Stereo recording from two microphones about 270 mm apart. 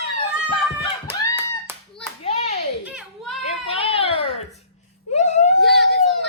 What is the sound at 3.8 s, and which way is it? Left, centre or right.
Baby cry, left.